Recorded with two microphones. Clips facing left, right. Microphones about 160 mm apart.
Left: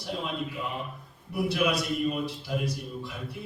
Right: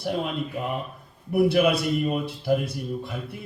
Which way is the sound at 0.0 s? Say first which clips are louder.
Right 5 dB; 55° right (ahead or behind).